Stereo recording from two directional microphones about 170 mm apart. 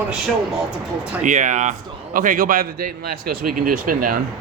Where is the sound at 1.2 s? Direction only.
45° right (ahead or behind).